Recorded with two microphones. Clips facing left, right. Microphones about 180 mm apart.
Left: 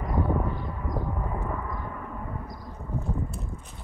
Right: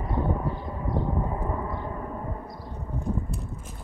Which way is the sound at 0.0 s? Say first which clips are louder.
Left 1 dB; 30° right (ahead or behind).